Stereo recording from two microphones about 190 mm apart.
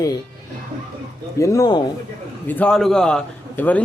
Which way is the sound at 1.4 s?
15° left (ahead or behind).